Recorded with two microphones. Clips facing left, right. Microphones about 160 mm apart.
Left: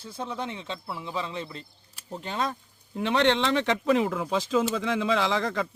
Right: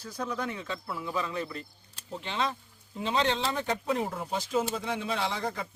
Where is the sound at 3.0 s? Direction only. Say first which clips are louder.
Left 5 dB; 70° left (ahead or behind).